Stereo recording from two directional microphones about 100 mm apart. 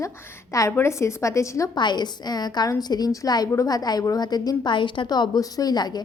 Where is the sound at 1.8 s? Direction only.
45° left (ahead or behind).